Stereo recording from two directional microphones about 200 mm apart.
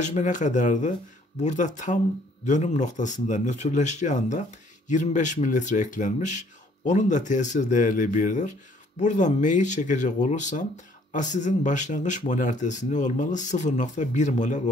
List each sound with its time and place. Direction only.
0.0 s speech: 35° left (ahead or behind)